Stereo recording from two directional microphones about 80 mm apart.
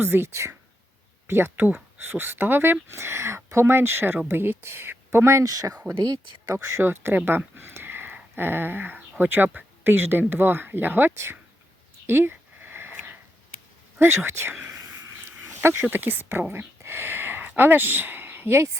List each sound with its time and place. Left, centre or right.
0.0 s speech: right
1.5 s speech: right
12.0 s a sound: right
14.0 s speech: right
14.7 s a sound: right
15.6 s speech: right